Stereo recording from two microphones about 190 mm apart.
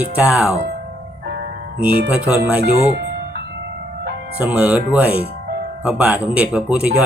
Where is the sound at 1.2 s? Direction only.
60° right (ahead or behind).